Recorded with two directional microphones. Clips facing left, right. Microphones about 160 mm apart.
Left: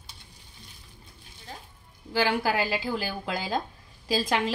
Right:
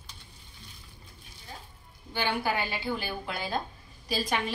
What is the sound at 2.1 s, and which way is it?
A woman's voice, 90° left.